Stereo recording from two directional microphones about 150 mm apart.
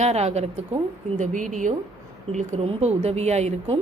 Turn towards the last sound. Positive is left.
turn(degrees=-45)  # may be behind; listen again after turning